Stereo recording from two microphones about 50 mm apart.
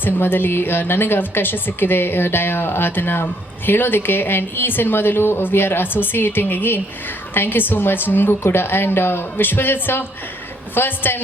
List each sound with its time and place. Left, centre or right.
0.0 s speech: left